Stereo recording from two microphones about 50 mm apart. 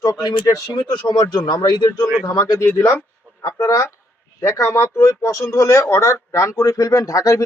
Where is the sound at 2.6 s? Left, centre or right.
Left.